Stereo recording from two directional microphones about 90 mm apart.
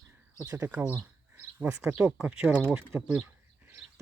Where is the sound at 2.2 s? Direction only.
10° right (ahead or behind).